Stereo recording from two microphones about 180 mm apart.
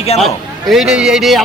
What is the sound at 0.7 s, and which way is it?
Speech, 5° right (ahead or behind).